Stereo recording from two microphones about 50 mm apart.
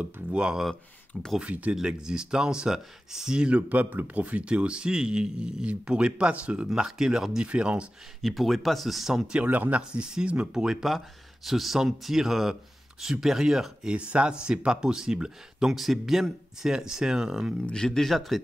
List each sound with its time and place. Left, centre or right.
0.0 s speech: centre
1.8 s speech: centre
3.6 s speech: right
8.2 s speech: centre
9.3 s speech: right
10.5 s speech: centre
13.9 s speech: right
17.7 s speech: centre